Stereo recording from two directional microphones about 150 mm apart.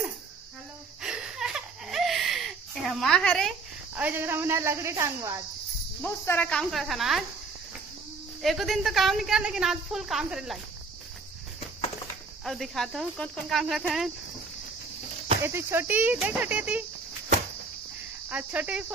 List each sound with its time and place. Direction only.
1.0 s a sound: 5° right (ahead or behind)
3.9 s speech: 15° right (ahead or behind)
6.0 s a woman's voice: 10° left (ahead or behind)
8.4 s a woman's voice: centre (ahead or behind)
12.4 s a woman's voice: centre (ahead or behind)
15.4 s speech: 15° right (ahead or behind)
18.3 s speech: 10° right (ahead or behind)